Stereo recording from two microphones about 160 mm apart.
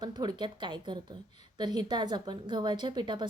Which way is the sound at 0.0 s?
25° right (ahead or behind).